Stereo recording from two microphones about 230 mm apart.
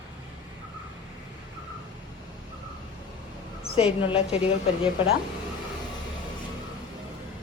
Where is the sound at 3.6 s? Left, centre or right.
Centre.